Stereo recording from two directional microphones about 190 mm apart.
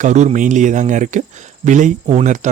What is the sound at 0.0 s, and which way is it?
Speech, 40° right (ahead or behind).